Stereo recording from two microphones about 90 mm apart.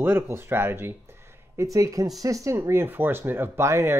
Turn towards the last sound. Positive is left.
turn(degrees=-30)  # may be behind; listen again after turning